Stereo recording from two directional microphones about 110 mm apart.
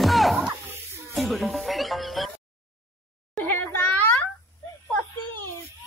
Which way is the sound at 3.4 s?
20° left (ahead or behind).